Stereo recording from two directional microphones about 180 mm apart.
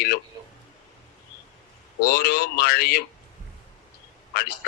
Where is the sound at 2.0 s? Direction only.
55° left (ahead or behind).